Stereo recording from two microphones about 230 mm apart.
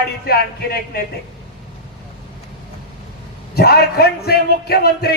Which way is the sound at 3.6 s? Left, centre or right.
Left.